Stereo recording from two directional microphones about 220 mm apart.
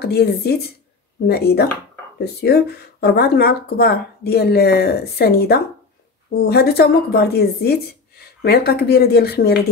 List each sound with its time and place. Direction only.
0.0 s speech: 45° left (ahead or behind)